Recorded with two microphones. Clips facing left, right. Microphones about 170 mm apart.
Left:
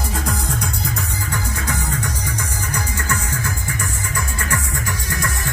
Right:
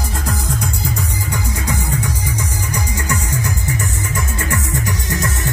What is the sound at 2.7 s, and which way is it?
Music, 15° right (ahead or behind).